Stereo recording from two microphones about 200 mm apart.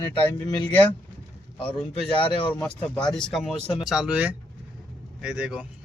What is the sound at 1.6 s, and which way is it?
Speech, 25° left (ahead or behind).